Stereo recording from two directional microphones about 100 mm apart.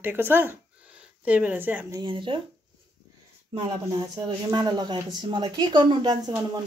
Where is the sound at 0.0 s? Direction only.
20° right (ahead or behind).